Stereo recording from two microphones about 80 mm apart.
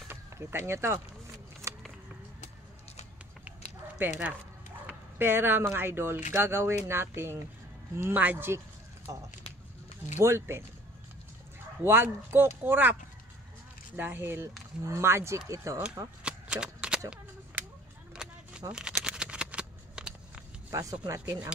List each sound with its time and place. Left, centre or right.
0.1 s speech: right
1.7 s a sound: right
4.0 s speech: centre
9.1 s speech: right
10.1 s speech: right
11.8 s speech: right
13.9 s speech: right
16.3 s cap gun: centre
18.1 s a sound: centre
20.7 s speech: right